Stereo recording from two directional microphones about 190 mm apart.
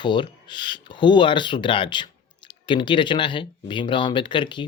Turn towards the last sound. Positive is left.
turn(degrees=25)  # may be behind; listen again after turning